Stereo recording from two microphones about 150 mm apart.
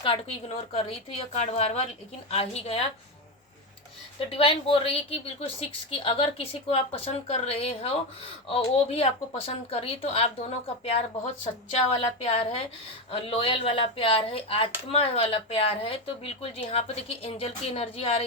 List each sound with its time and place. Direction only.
0.0 s a woman's voice: 40° left (ahead or behind)
4.2 s speech: 40° left (ahead or behind)
11.9 s speech: 40° left (ahead or behind)